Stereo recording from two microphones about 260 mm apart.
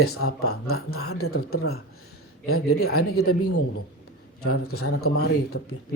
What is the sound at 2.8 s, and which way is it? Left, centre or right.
Speech, left.